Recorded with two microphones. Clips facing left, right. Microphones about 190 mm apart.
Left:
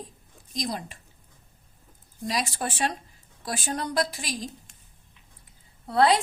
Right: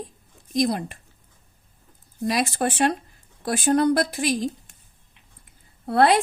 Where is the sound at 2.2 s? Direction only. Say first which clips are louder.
Right 6 dB; 60° right (ahead or behind).